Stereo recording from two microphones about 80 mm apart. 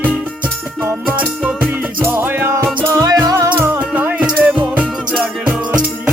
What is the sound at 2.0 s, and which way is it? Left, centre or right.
Music, right.